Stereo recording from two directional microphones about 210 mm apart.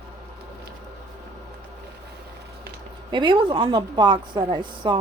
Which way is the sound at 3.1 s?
20° right (ahead or behind).